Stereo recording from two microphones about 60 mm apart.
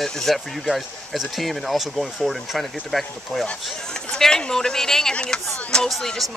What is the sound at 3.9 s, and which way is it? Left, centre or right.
Speech, centre.